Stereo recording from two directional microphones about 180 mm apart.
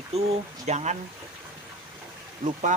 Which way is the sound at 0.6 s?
40° right (ahead or behind).